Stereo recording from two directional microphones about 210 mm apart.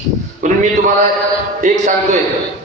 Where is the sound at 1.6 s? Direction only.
35° right (ahead or behind).